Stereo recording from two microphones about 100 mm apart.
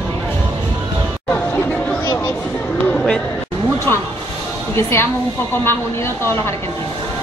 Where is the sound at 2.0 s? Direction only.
30° left (ahead or behind).